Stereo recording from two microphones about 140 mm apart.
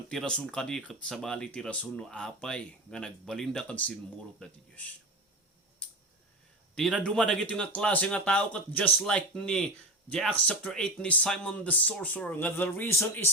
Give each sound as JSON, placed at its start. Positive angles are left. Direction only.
{"t": 0.1, "sound": "speech", "side_deg": 5}
{"t": 6.7, "sound": "speech", "side_deg": 0}